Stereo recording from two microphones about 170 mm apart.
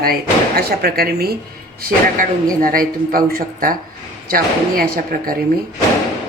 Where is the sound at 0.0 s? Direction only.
60° right (ahead or behind).